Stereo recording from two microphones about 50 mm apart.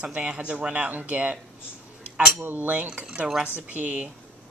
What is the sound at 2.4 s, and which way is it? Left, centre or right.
Cutlery, right.